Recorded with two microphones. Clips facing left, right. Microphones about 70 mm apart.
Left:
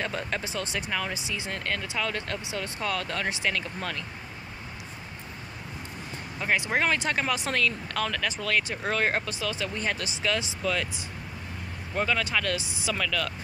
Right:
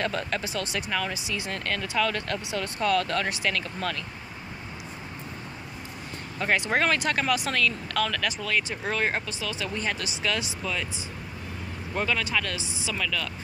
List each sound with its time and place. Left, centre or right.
0.0 s speech: left
6.4 s speech: centre; by 8.4 s left
8.4 s speech: left
12.0 s speech: left